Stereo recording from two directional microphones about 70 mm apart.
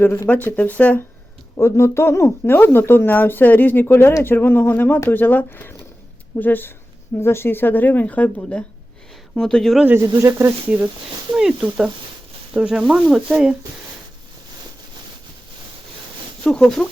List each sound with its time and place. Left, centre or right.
0.0 s speech: left
0.3 s speech: left
1.5 s speech: left
9.3 s speech: centre
10.2 s speech: right
11.3 s speech: centre
16.4 s speech: centre